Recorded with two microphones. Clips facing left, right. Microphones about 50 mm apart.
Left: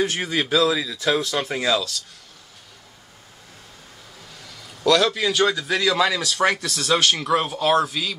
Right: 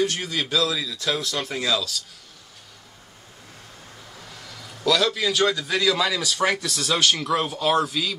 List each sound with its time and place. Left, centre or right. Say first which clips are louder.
0.0 s speech: left 2 dB; left
4.5 s a man's voice: left 4 dB; centre